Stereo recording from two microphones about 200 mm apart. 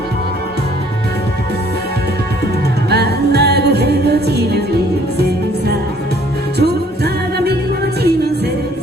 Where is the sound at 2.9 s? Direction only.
55° right (ahead or behind).